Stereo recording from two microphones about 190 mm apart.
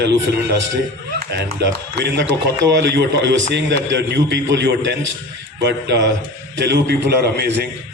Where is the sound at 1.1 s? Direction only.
60° right (ahead or behind).